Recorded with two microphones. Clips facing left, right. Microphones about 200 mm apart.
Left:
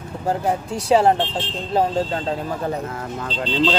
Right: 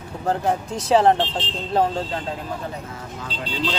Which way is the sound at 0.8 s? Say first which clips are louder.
Left 1 dB; 10° left (ahead or behind).